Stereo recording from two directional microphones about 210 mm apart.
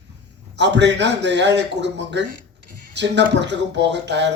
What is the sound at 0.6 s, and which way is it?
Speech, 55° right (ahead or behind).